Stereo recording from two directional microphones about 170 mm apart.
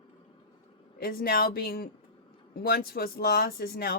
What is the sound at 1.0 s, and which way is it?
Speech, 60° left (ahead or behind).